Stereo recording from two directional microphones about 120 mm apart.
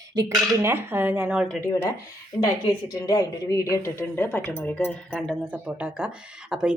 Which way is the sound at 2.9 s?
30° left (ahead or behind).